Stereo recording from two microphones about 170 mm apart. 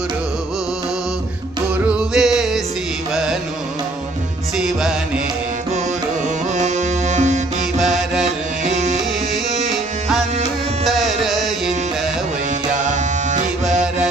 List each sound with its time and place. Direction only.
1.9 s music: 5° right (ahead or behind)
4.5 s music: 5° right (ahead or behind)
6.5 s music: 45° right (ahead or behind)
7.8 s music: centre (ahead or behind)
8.6 s music: 45° right (ahead or behind)
9.3 s music: centre (ahead or behind)
10.8 s carnatic music: centre (ahead or behind)
12.8 s music: 45° right (ahead or behind)